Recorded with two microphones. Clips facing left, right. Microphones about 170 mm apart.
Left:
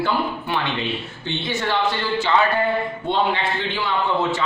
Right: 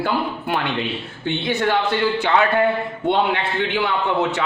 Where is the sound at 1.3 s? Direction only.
55° right (ahead or behind).